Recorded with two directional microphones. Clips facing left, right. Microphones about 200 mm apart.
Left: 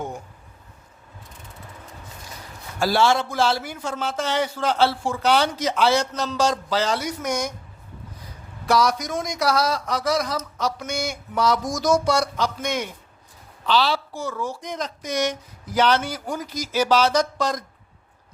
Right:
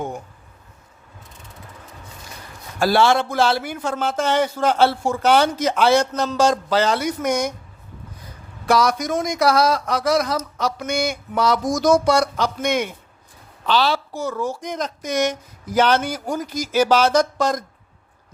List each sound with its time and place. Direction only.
2.8 s a man's voice: 60° right (ahead or behind)
8.6 s a man's voice: 55° right (ahead or behind)